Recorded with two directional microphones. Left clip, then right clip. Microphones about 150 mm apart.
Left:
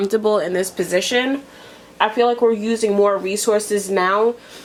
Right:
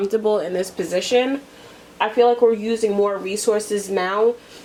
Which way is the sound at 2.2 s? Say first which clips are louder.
Right 2 dB; 55° left (ahead or behind).